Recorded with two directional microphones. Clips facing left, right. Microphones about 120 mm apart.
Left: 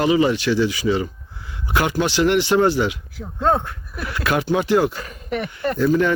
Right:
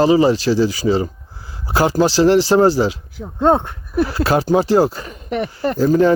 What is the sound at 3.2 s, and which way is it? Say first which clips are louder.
Speech: right 5 dB; 20° right (ahead or behind).